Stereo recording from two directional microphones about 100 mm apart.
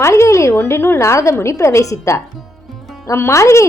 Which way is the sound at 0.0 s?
30° left (ahead or behind).